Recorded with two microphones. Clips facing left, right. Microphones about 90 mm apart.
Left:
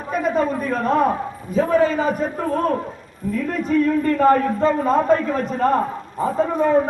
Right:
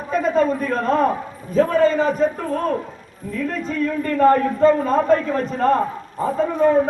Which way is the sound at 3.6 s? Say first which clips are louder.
Left 8 dB; 15° left (ahead or behind).